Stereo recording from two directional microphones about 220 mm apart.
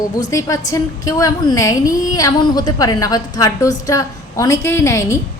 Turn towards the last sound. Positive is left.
turn(degrees=15)  # may be behind; listen again after turning